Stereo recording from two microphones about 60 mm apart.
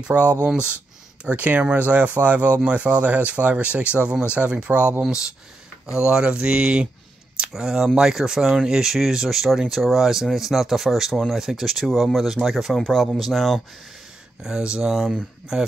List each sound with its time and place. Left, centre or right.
0.1 s speech: right
5.9 s speech: centre
14.4 s speech: centre